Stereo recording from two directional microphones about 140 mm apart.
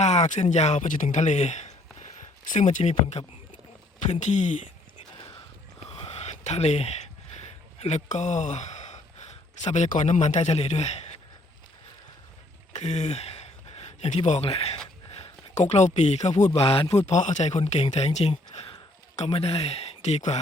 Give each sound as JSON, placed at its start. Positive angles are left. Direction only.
{"t": 0.0, "sound": "speech", "side_deg": 55}
{"t": 5.1, "sound": "a sound", "side_deg": 35}
{"t": 7.8, "sound": "speech", "side_deg": 55}
{"t": 8.1, "sound": "a sound", "side_deg": 60}
{"t": 9.6, "sound": "speech", "side_deg": 60}
{"t": 12.7, "sound": "speech", "side_deg": 55}
{"t": 16.6, "sound": "speech", "side_deg": 45}
{"t": 16.9, "sound": "speech", "side_deg": 55}